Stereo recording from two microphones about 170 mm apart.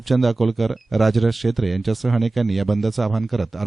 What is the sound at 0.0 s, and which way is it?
Speech, centre (ahead or behind).